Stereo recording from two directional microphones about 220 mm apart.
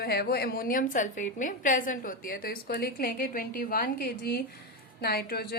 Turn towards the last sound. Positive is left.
turn(degrees=45)  # may be behind; listen again after turning